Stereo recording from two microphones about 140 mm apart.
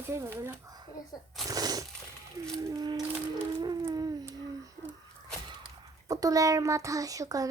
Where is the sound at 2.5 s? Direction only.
30° right (ahead or behind).